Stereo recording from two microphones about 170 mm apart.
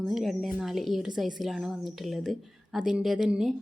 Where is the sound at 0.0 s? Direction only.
Centre (ahead or behind).